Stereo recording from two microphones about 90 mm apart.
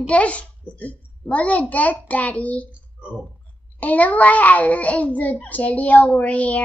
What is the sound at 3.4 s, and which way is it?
A child's voice, 15° left (ahead or behind).